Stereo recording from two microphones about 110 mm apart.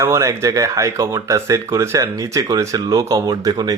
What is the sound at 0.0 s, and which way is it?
Speech, 25° right (ahead or behind).